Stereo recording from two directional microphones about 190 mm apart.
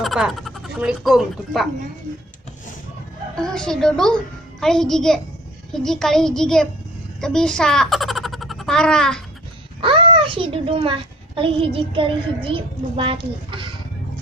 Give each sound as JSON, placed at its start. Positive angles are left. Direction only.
{"t": 0.0, "sound": "speech", "side_deg": 0}
{"t": 3.4, "sound": "a child's voice", "side_deg": 5}
{"t": 9.8, "sound": "a child's voice", "side_deg": -30}